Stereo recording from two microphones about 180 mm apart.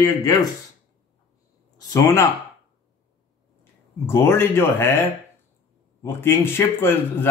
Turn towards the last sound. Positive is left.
turn(degrees=15)  # may be behind; listen again after turning